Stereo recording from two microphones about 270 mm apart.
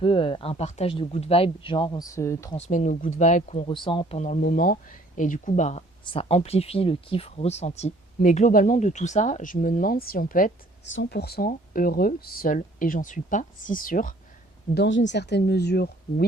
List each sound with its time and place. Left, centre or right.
0.0 s speech: centre
2.6 s speech: left
14.8 s speech: left